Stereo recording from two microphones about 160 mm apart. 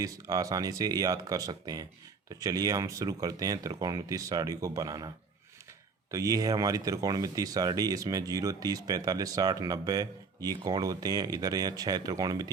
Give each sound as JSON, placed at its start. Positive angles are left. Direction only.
{"t": 0.0, "sound": "speech", "side_deg": -20}